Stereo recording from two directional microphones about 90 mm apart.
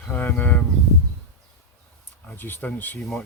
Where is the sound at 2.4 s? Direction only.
20° left (ahead or behind).